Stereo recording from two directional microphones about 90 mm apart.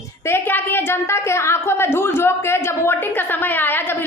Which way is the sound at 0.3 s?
25° left (ahead or behind).